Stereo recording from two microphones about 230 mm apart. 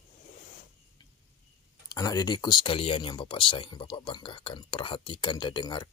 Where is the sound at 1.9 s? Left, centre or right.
Centre.